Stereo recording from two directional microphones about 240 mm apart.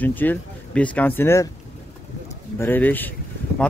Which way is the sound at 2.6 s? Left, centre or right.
Centre.